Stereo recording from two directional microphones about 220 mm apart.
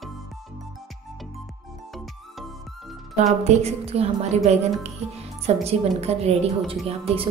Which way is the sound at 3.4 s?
30° right (ahead or behind).